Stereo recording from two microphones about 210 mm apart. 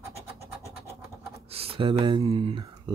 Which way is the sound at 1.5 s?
25° right (ahead or behind).